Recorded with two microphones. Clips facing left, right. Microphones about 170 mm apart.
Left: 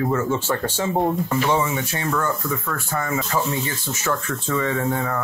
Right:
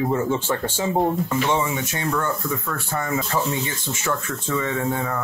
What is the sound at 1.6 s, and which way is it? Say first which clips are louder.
Speech: left 1 dB; 25° right (ahead or behind).